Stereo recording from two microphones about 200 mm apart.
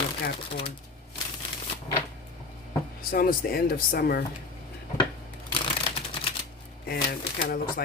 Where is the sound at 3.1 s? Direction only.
45° left (ahead or behind).